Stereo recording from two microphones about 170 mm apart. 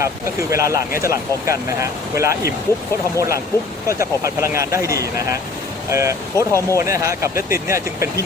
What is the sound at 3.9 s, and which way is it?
Speech, 15° right (ahead or behind).